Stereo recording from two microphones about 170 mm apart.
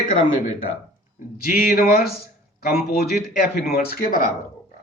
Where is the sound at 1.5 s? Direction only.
55° left (ahead or behind).